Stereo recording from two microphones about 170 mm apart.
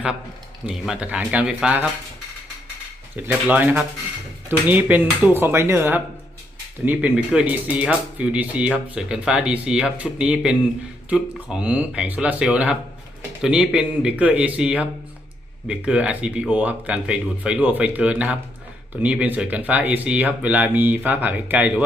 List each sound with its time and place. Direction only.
0.6 s speech: 5° right (ahead or behind)
3.2 s speech: 10° right (ahead or behind)